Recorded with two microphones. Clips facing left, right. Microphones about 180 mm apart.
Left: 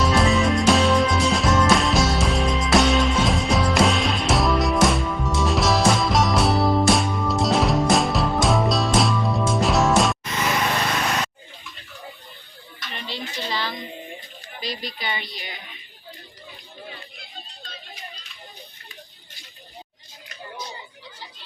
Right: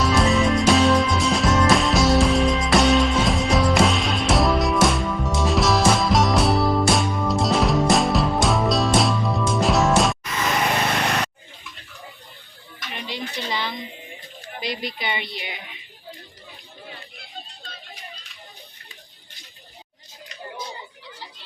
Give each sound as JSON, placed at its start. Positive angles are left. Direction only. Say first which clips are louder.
{"t": 0.0, "sound": "music", "louder": "even", "side_deg": 0}
{"t": 12.9, "sound": "a sound", "louder": "right 2 dB", "side_deg": -15}
{"t": 14.6, "sound": "speech", "louder": "right 2 dB", "side_deg": -20}